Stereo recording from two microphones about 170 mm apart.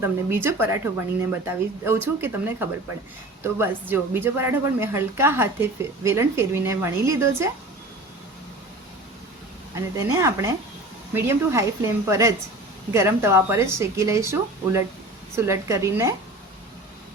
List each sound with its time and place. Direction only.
0.0 s a woman's voice: 15° right (ahead or behind)
9.7 s a woman's voice: 15° right (ahead or behind)